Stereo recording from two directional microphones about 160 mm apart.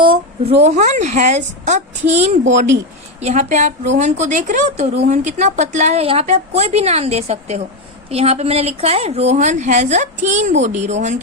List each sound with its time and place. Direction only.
0.0 s speech: 35° right (ahead or behind)